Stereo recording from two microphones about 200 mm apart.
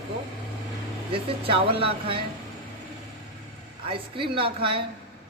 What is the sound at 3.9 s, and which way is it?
Speech, 25° right (ahead or behind).